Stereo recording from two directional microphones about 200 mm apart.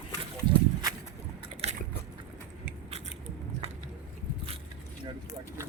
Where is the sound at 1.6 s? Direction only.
30° right (ahead or behind).